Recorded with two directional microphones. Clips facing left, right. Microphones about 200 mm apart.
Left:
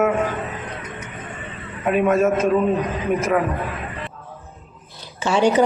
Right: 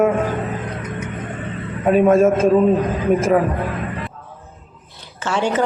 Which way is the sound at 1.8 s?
35° right (ahead or behind).